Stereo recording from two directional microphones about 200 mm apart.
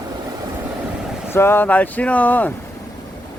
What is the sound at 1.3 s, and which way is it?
Speech, 10° left (ahead or behind).